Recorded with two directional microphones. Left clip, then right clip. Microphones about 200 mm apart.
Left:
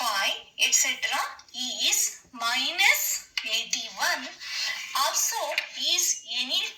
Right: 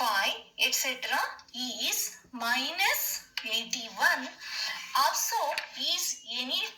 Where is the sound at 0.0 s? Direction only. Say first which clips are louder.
Left 1 dB; 40° right (ahead or behind).